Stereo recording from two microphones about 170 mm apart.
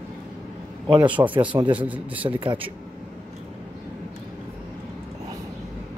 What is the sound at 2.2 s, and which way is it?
Speech, 30° right (ahead or behind).